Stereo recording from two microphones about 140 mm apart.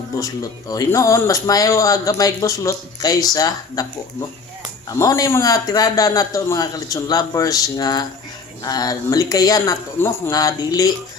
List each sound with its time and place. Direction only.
0.2 s speech: 25° left (ahead or behind)